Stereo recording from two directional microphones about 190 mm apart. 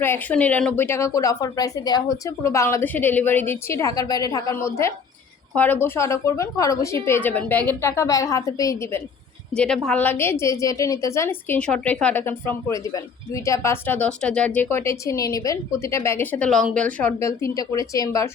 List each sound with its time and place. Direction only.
0.0 s a woman's voice: 10° left (ahead or behind)
9.6 s a woman's voice: 5° left (ahead or behind)